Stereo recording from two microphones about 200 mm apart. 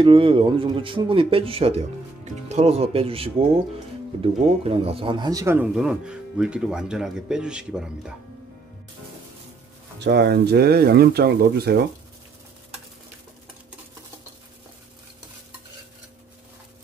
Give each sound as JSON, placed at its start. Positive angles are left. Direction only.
{"t": 0.0, "sound": "speech", "side_deg": -25}
{"t": 9.9, "sound": "speech", "side_deg": -55}